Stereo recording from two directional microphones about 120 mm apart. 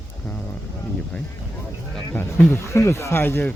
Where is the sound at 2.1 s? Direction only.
15° left (ahead or behind).